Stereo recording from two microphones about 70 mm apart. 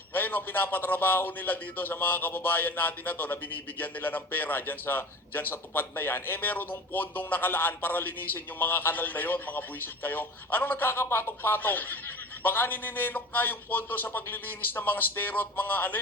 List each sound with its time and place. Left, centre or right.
0.1 s a man's voice: left